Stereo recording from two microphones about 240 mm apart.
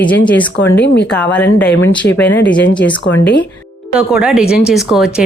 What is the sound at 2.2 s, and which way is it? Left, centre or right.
Speech, left.